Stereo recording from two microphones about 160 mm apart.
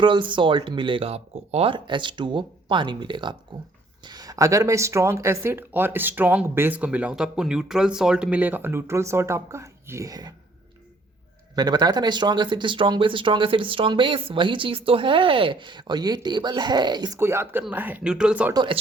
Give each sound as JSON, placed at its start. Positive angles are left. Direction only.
{"t": 0.0, "sound": "speech", "side_deg": -30}
{"t": 11.5, "sound": "speech", "side_deg": -25}
{"t": 17.2, "sound": "speech", "side_deg": -15}
{"t": 18.5, "sound": "speech", "side_deg": -30}